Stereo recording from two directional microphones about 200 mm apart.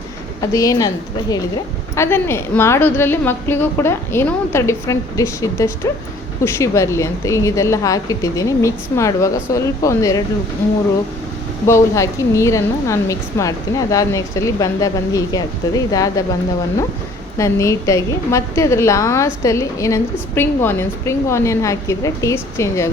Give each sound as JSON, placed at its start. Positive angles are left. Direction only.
{"t": 0.5, "sound": "a woman's voice", "side_deg": 15}
{"t": 2.0, "sound": "a woman's voice", "side_deg": 10}
{"t": 11.6, "sound": "a woman's voice", "side_deg": 15}
{"t": 17.3, "sound": "a woman's voice", "side_deg": 15}